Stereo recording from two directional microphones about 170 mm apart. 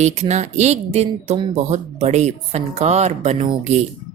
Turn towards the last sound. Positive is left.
turn(degrees=-40)  # may be behind; listen again after turning